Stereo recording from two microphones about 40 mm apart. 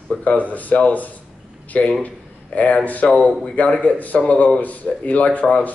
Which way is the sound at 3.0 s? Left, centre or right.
Left.